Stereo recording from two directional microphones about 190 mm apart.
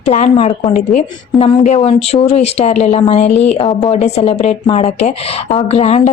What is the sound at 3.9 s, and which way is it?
A woman's voice, 35° left (ahead or behind).